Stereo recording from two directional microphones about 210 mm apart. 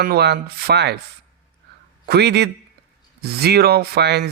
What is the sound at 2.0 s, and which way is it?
A man's voice, 50° right (ahead or behind).